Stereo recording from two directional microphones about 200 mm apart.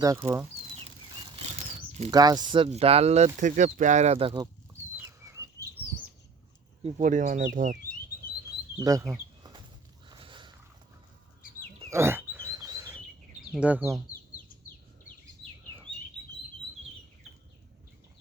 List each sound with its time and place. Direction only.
0.0 s speech: 15° right (ahead or behind)
1.3 s bird flight: 30° right (ahead or behind)
2.0 s speech: 20° right (ahead or behind)
4.9 s livestock: 15° right (ahead or behind)
6.8 s speech: 40° right (ahead or behind)
8.8 s a sound: 15° right (ahead or behind)
10.1 s biting: 25° right (ahead or behind)
11.9 s frog: 15° right (ahead or behind)
13.5 s speech: 5° right (ahead or behind)